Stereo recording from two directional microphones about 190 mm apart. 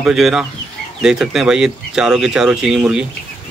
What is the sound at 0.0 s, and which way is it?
Speech, 5° right (ahead or behind).